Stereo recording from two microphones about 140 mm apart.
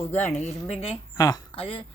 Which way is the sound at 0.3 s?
50° left (ahead or behind).